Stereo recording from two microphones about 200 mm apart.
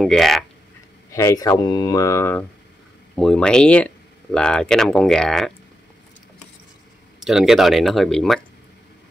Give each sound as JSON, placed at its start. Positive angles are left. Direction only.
{"t": 0.0, "sound": "speech", "side_deg": 0}
{"t": 1.1, "sound": "speech", "side_deg": 15}
{"t": 7.2, "sound": "speech", "side_deg": 0}